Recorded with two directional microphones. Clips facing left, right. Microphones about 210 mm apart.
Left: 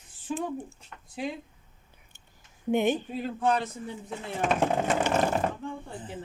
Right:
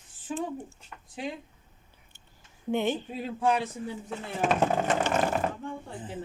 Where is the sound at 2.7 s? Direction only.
15° left (ahead or behind).